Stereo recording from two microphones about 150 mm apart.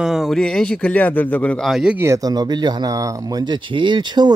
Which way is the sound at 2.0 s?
20° right (ahead or behind).